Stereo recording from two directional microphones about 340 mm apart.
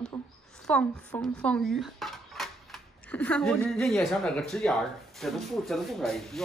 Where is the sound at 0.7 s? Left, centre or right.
Centre.